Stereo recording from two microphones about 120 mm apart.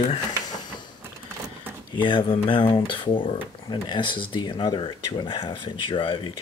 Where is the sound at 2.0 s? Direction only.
45° left (ahead or behind).